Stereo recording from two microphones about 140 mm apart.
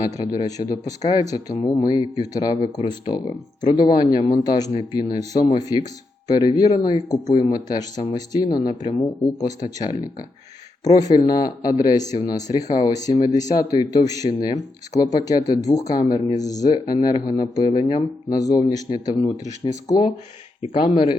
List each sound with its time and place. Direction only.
0.2 s speech: 25° left (ahead or behind)
14.3 s speech: 40° left (ahead or behind)
14.9 s speech: 25° left (ahead or behind)
17.7 s speech: 40° left (ahead or behind)
18.3 s speech: 25° left (ahead or behind)